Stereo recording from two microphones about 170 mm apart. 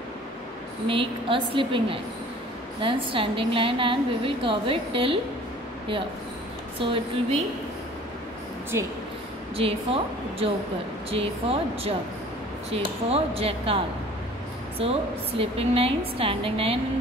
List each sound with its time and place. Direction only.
0.8 s a woman's voice: 30° right (ahead or behind)
6.8 s a woman's voice: 30° right (ahead or behind)
8.7 s a woman's voice: 15° right (ahead or behind)
9.6 s a woman's voice: 35° right (ahead or behind)
11.1 s a woman's voice: 35° right (ahead or behind)